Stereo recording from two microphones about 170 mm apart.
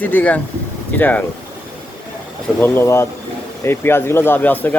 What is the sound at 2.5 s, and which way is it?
Speech, 10° left (ahead or behind).